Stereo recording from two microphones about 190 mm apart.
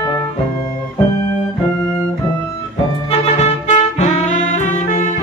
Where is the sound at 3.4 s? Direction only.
35° left (ahead or behind).